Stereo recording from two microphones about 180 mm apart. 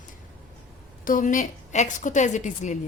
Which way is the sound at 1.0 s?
50° left (ahead or behind).